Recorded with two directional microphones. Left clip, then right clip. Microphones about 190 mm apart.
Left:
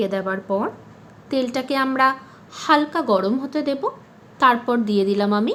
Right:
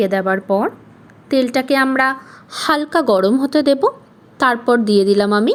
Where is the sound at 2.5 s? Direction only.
40° right (ahead or behind).